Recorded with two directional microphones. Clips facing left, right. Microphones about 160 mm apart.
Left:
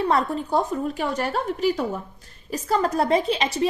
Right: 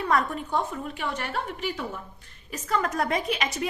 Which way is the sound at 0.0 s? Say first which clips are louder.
Left 4 dB; 30° left (ahead or behind).